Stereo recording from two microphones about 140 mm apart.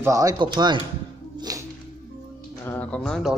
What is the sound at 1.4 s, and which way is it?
Music, 25° right (ahead or behind).